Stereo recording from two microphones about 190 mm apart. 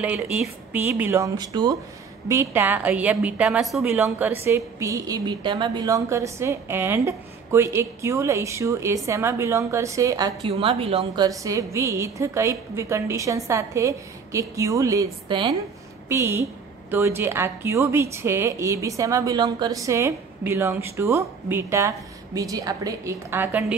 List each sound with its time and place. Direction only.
0.0 s speech: 10° right (ahead or behind)
10.5 s a woman's voice: 30° right (ahead or behind)
11.2 s speech: 15° right (ahead or behind)